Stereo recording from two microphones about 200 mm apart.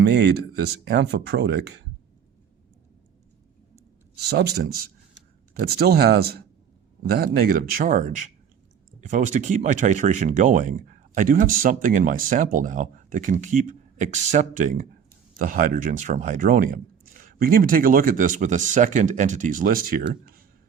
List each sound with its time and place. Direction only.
0.0 s speech: 55° right (ahead or behind)
4.2 s speech: 55° right (ahead or behind)